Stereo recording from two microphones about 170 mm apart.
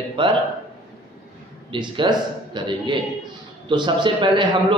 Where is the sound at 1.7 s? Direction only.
30° right (ahead or behind).